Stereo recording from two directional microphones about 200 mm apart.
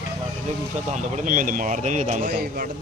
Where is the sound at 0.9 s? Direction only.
40° right (ahead or behind).